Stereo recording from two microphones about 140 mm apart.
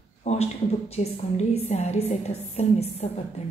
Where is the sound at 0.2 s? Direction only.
50° left (ahead or behind).